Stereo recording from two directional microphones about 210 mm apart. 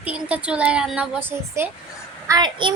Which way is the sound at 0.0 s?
5° right (ahead or behind).